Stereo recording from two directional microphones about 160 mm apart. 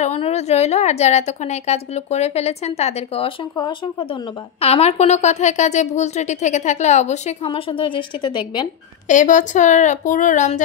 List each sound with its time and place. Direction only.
0.0 s a woman's voice: 40° left (ahead or behind)
9.0 s a woman's voice: 50° left (ahead or behind)